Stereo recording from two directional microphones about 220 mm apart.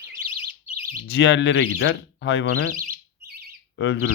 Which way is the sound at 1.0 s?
65° left (ahead or behind).